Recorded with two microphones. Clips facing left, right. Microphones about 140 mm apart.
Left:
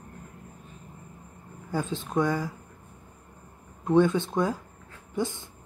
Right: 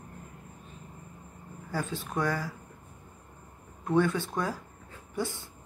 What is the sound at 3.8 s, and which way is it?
Speech, 20° left (ahead or behind).